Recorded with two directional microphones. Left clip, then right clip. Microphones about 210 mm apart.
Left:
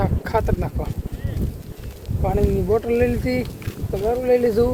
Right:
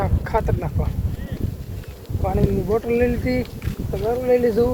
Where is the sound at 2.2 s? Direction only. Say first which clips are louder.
Left 1 dB; 15° left (ahead or behind).